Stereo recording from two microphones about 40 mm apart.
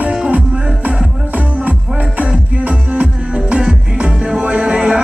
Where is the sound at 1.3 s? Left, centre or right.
Right.